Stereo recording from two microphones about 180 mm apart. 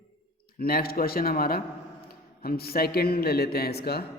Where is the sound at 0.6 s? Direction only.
55° left (ahead or behind).